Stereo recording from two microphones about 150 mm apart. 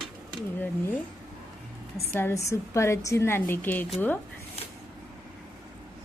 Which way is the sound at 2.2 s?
15° left (ahead or behind).